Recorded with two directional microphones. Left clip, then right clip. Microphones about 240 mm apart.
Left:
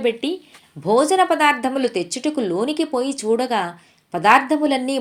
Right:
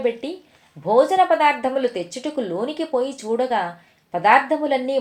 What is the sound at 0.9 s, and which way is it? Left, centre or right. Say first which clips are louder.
A woman's voice: even; left.